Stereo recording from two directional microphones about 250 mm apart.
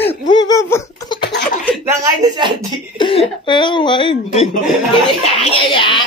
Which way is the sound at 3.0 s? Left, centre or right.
Left.